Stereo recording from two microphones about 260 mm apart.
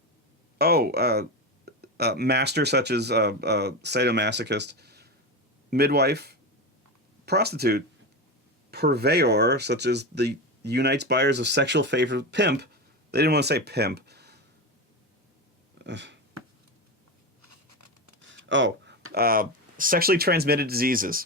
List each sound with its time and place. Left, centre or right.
0.6 s speech: right
15.8 s speech: right
17.4 s a sound: right
18.2 s speech: right